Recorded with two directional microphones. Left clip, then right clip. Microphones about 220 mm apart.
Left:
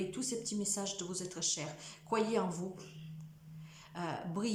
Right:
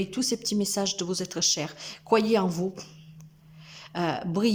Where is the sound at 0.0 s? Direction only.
35° right (ahead or behind).